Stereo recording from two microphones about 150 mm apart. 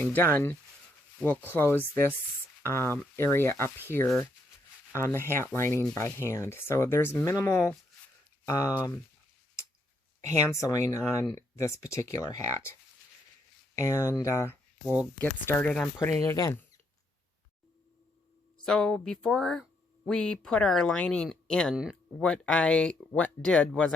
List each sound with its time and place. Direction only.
0.0 s speech: 15° left (ahead or behind)
10.5 s speech: 20° left (ahead or behind)
13.7 s speech: 20° left (ahead or behind)
18.6 s speech: 5° left (ahead or behind)